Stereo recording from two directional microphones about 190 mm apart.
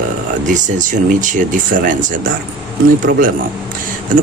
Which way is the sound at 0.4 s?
40° right (ahead or behind).